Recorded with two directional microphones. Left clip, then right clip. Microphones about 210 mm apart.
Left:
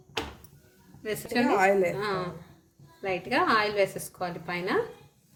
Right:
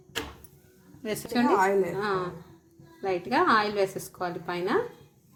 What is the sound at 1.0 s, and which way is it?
A woman's voice, 10° right (ahead or behind).